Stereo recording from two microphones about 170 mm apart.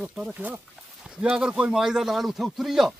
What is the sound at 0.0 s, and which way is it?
Speech, 5° right (ahead or behind).